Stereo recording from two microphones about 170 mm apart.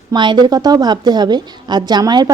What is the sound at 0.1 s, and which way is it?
A woman's voice, 25° right (ahead or behind).